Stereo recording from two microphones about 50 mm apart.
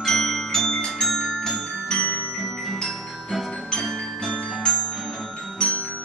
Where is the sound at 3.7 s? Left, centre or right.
Centre.